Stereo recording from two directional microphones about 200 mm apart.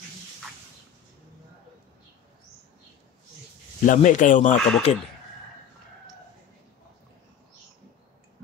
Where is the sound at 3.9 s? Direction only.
40° left (ahead or behind).